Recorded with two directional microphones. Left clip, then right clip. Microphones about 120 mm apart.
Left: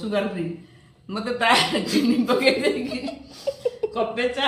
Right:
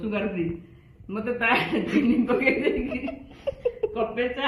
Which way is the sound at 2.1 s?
50° left (ahead or behind).